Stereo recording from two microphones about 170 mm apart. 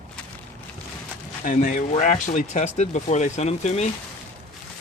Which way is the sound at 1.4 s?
50° left (ahead or behind).